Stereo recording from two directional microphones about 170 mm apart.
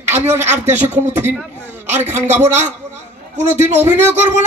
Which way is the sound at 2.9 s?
40° right (ahead or behind).